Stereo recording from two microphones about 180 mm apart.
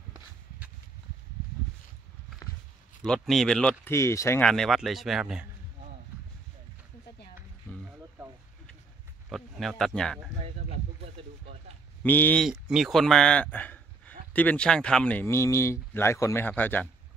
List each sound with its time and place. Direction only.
3.0 s a man's voice: centre (ahead or behind)
4.5 s a man's voice: centre (ahead or behind)
9.3 s a man's voice: centre (ahead or behind)
11.2 s a sound: 30° right (ahead or behind)
12.0 s speech: 10° left (ahead or behind)
12.4 s a man's voice: 5° right (ahead or behind)